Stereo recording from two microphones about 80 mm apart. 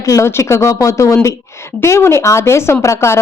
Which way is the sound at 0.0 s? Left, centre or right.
Left.